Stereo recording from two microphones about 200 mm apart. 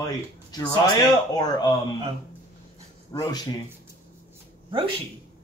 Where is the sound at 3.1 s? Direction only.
20° left (ahead or behind).